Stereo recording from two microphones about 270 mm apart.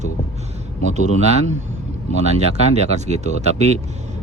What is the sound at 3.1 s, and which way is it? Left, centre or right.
Speech, right.